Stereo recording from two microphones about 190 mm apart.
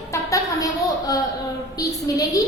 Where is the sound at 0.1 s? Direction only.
15° left (ahead or behind).